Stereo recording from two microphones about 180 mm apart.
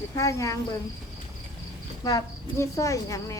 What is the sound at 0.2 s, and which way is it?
Speech, 20° left (ahead or behind).